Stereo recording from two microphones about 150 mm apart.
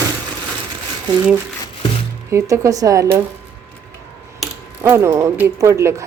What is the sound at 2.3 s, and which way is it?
Speech, 20° right (ahead or behind).